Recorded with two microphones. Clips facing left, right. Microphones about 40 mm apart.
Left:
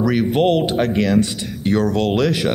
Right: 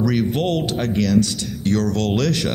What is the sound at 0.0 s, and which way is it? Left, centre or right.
Speech, centre.